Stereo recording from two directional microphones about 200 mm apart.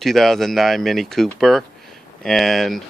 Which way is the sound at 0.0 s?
Centre (ahead or behind).